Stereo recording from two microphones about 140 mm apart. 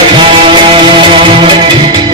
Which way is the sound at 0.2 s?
40° right (ahead or behind).